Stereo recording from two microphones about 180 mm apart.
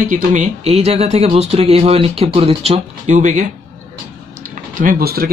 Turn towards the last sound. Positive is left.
turn(degrees=-55)  # may be behind; listen again after turning